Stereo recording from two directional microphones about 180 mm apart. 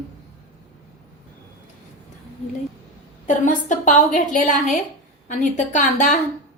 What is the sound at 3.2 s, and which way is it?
A woman's voice, 45° left (ahead or behind).